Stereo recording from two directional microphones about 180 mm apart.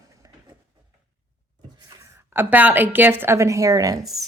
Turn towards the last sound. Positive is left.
turn(degrees=0)  # may be behind; listen again after turning